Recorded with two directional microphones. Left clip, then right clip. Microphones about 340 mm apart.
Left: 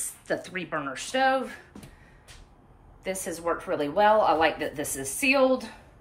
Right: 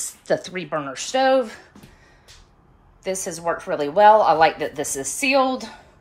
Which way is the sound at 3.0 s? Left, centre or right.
Centre.